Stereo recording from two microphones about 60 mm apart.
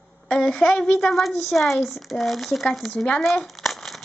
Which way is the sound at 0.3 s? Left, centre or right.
Centre.